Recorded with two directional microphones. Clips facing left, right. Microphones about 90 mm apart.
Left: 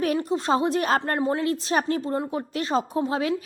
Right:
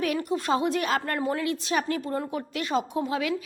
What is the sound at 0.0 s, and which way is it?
A woman's voice, 30° left (ahead or behind).